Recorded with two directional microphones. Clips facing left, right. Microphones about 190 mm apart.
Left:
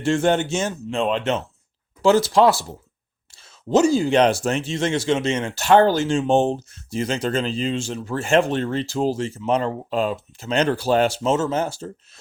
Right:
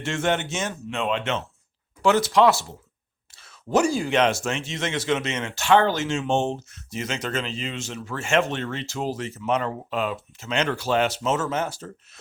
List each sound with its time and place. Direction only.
0.0 s speech: 35° left (ahead or behind)